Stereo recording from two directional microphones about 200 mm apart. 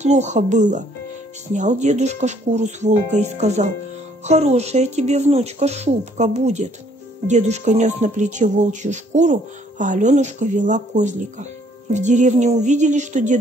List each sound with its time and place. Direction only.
0.0 s speech: 35° right (ahead or behind)